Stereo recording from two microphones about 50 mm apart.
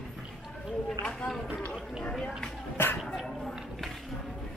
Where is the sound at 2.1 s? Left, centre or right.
Centre.